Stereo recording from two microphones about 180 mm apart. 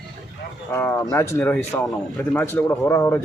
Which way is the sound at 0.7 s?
10° left (ahead or behind).